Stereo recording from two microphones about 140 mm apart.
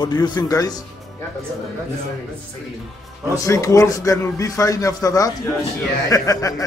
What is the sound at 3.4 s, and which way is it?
A man's voice, 25° left (ahead or behind).